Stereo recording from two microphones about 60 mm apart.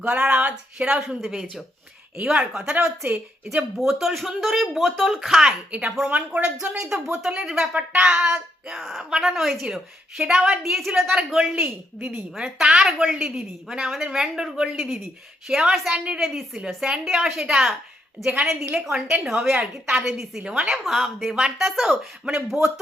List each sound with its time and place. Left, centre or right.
0.0 s a woman's voice: right
3.8 s speech: centre
6.1 s speech: right
6.7 s a woman's voice: centre
8.6 s speech: centre
9.0 s a woman's voice: centre
11.5 s a woman's voice: right
12.5 s a woman's voice: centre
16.2 s speech: centre
16.6 s a woman's voice: centre
20.4 s speech: centre
20.8 s speech: centre